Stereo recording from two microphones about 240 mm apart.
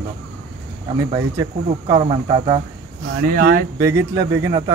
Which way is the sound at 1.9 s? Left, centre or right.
Right.